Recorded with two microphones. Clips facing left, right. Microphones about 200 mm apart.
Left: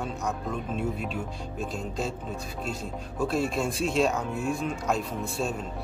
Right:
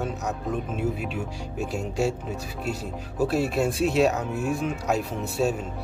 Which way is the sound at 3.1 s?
5° right (ahead or behind).